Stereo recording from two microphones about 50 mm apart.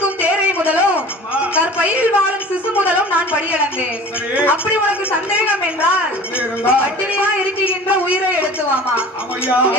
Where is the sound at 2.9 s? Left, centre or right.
Right.